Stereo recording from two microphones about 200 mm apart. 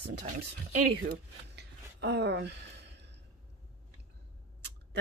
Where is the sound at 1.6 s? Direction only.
60° right (ahead or behind).